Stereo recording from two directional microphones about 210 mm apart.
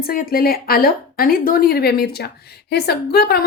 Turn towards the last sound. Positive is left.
turn(degrees=50)  # may be behind; listen again after turning